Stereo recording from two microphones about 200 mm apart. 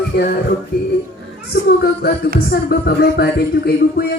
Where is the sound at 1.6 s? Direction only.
50° left (ahead or behind).